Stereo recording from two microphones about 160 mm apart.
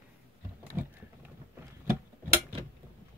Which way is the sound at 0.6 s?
10° right (ahead or behind).